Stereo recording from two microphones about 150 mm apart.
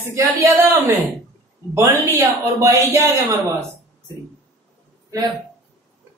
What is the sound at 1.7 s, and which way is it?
Speech, 20° right (ahead or behind).